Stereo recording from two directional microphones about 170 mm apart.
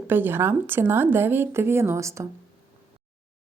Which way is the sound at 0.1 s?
10° right (ahead or behind).